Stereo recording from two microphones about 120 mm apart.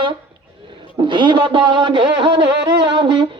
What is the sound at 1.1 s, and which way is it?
A man's voice, 40° right (ahead or behind).